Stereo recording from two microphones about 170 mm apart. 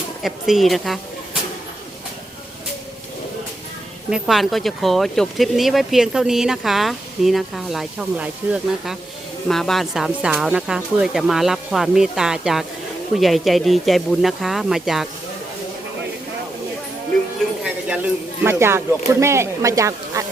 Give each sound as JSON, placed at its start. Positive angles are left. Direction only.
{"t": 0.2, "sound": "speech", "side_deg": 0}
{"t": 4.1, "sound": "speech", "side_deg": 0}
{"t": 17.6, "sound": "a sound", "side_deg": -5}
{"t": 18.4, "sound": "speech", "side_deg": -15}